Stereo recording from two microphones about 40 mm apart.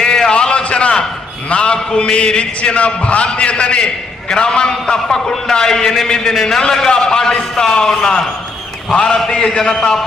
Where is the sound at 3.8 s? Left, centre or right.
Centre.